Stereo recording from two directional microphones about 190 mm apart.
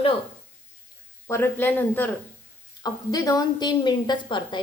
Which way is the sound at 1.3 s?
10° left (ahead or behind).